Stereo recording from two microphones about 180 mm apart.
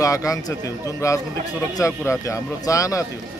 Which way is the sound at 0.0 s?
20° left (ahead or behind).